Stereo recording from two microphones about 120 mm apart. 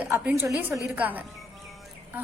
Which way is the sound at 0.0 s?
15° right (ahead or behind).